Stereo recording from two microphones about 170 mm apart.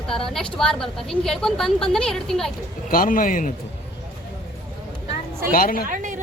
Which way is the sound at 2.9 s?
55° left (ahead or behind).